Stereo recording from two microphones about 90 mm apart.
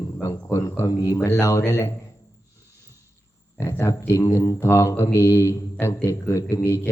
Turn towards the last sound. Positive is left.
turn(degrees=30)  # may be behind; listen again after turning